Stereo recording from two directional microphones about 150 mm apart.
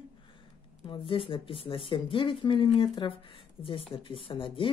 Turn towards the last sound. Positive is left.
turn(degrees=35)  # may be behind; listen again after turning